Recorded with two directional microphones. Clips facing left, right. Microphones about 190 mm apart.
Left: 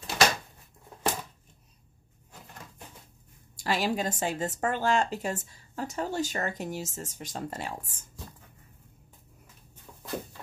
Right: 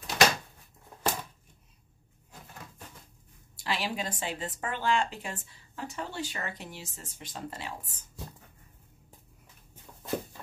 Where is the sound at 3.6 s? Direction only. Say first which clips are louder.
Left 5 dB; 45° left (ahead or behind).